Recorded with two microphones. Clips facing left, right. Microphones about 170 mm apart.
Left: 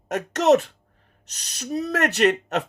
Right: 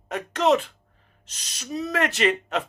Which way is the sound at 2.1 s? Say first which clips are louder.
Left 3 dB; 65° left (ahead or behind).